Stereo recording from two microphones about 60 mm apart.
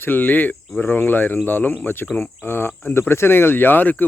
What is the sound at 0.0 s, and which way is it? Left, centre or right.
Speech, left.